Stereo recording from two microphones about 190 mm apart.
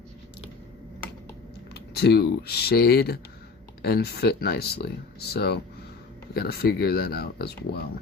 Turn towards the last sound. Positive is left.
turn(degrees=55)  # may be behind; listen again after turning